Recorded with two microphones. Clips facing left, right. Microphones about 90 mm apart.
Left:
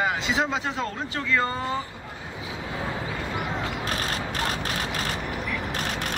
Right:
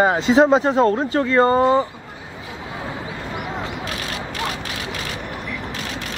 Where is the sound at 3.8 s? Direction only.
40° left (ahead or behind).